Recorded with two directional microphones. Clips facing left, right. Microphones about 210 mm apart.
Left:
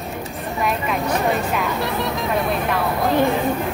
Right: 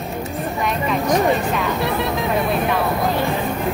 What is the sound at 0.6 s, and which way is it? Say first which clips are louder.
Speech: even; centre (ahead or behind).